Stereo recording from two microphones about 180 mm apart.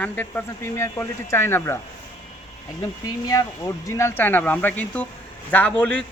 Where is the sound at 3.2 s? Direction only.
20° left (ahead or behind).